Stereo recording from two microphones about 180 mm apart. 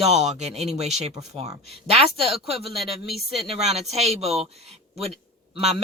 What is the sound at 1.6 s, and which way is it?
Speech, 35° right (ahead or behind).